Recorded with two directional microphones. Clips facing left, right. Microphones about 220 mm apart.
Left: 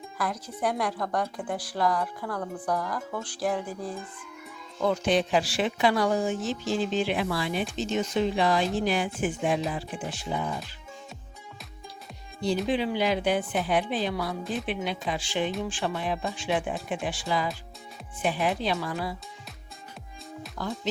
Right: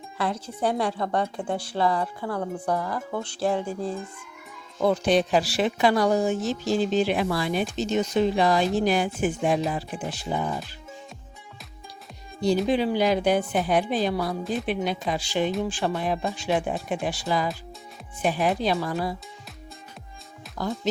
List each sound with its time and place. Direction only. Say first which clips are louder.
0.2 s a woman's voice: right 3 dB; 30° right (ahead or behind)
12.6 s speech: right 4 dB; 40° right (ahead or behind)
20.6 s speech: right 4 dB; 40° right (ahead or behind)